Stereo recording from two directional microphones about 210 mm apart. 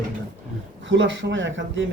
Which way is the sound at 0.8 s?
65° right (ahead or behind).